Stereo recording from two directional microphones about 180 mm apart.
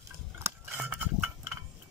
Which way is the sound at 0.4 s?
10° right (ahead or behind).